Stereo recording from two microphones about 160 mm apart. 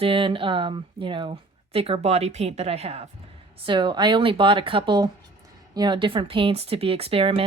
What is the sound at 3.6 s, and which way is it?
A woman's voice, 30° right (ahead or behind).